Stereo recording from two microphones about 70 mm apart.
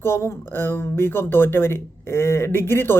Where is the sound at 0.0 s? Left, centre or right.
Left.